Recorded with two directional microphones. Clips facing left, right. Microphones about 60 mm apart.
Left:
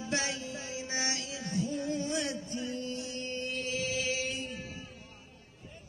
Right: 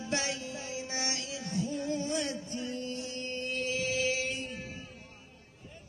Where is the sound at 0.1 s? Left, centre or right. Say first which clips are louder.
Even; left.